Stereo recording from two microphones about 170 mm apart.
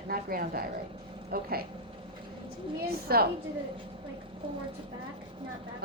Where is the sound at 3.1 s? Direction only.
65° right (ahead or behind).